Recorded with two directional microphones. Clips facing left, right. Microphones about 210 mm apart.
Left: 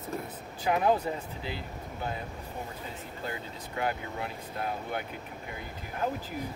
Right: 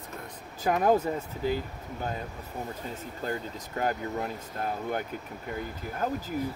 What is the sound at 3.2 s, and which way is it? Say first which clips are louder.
Speech: right 5 dB; 40° right (ahead or behind).